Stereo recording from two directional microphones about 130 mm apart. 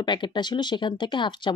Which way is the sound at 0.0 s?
35° left (ahead or behind).